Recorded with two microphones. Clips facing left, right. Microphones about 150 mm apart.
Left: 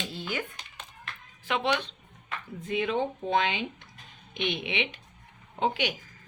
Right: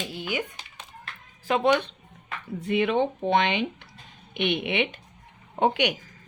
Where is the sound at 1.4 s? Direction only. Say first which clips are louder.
Right 6 dB; 45° right (ahead or behind).